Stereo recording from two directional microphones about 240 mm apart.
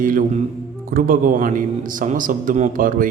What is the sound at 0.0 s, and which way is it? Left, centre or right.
A man's voice, right.